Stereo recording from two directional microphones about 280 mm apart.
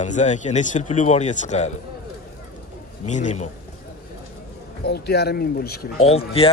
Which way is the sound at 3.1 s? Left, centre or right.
Left.